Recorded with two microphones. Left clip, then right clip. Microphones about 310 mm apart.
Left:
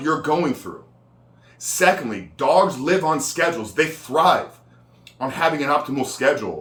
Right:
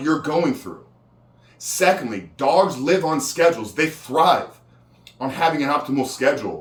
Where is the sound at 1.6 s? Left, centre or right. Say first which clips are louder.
Even; centre.